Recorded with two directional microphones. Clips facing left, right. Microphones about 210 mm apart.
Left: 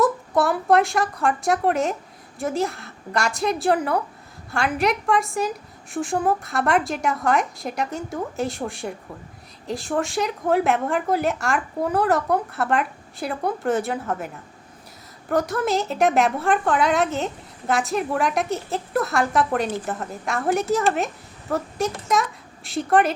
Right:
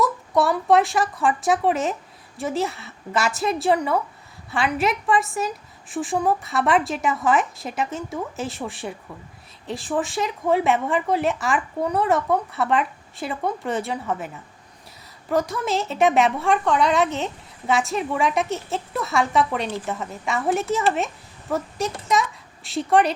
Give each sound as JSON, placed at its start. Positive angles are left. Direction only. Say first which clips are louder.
{"t": 0.0, "sound": "speech", "louder": "left 1 dB", "side_deg": 0}
{"t": 15.3, "sound": "speech", "louder": "left 1 dB", "side_deg": 0}